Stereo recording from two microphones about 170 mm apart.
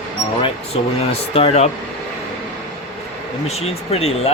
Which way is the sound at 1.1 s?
35° left (ahead or behind).